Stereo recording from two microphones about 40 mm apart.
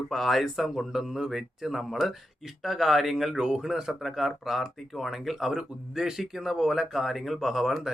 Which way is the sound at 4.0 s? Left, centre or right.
Centre.